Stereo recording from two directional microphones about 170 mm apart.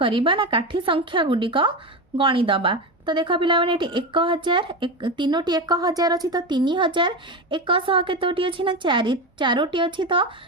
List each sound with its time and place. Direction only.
0.0 s a woman's voice: 30° right (ahead or behind)